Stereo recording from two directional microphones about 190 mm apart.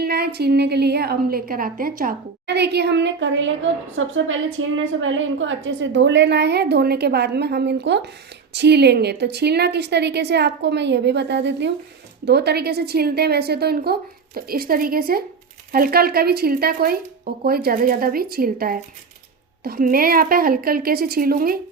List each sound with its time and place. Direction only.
0.0 s a woman's voice: 55° right (ahead or behind)